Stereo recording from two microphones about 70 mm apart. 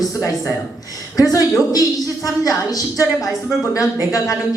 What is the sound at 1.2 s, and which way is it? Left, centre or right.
A woman's voice, left.